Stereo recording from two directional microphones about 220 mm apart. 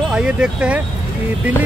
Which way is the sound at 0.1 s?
5° right (ahead or behind).